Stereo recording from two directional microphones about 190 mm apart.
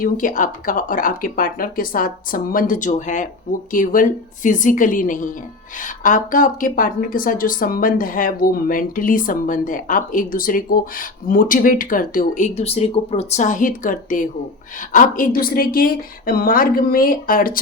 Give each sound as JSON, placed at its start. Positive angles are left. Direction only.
{"t": 0.0, "sound": "a woman's voice", "side_deg": 45}